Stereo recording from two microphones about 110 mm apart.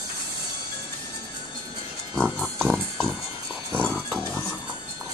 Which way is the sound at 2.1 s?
5° left (ahead or behind).